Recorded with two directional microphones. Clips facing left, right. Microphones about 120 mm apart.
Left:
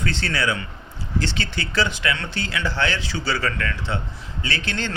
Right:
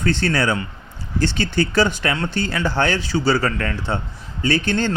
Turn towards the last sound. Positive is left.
turn(degrees=-45)  # may be behind; listen again after turning